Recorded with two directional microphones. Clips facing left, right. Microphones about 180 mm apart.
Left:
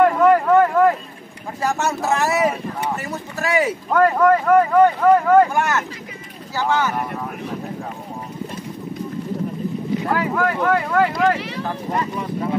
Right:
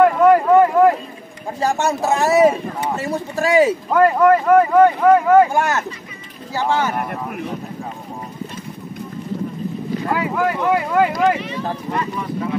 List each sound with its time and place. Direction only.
0.2 s a sound: 5° right (ahead or behind)
1.6 s speech: 30° right (ahead or behind)
3.9 s speech: 5° right (ahead or behind)
5.5 s speech: 30° right (ahead or behind)
10.1 s speech: 10° right (ahead or behind)